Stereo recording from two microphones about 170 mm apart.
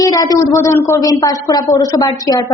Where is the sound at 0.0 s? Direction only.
20° left (ahead or behind).